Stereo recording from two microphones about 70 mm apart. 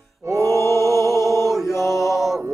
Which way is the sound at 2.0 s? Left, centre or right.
Centre.